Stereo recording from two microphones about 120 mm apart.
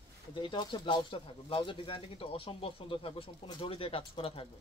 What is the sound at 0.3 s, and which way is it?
Speech, 40° left (ahead or behind).